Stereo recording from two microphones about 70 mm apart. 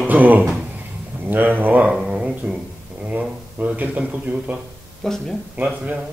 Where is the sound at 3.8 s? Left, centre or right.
Right.